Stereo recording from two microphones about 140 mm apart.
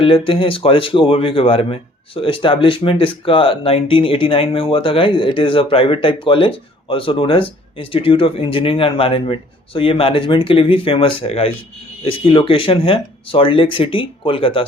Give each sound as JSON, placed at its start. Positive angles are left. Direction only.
{"t": 0.0, "sound": "speech", "side_deg": 40}